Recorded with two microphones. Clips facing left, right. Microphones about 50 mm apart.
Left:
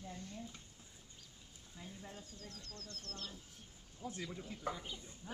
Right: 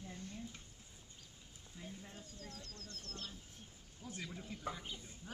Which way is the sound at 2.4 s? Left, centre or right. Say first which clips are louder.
Even; centre.